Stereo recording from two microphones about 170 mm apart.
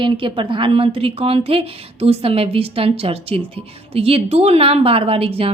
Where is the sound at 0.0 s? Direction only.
30° right (ahead or behind).